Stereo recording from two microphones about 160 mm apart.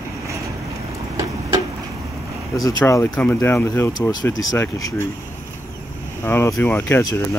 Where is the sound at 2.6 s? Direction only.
20° left (ahead or behind).